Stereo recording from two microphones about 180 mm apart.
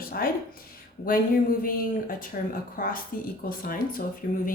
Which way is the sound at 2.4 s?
50° left (ahead or behind).